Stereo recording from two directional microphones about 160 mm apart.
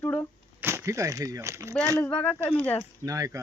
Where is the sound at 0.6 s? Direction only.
15° right (ahead or behind).